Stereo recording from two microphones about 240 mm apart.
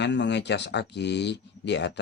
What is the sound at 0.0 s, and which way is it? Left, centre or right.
Speech, left.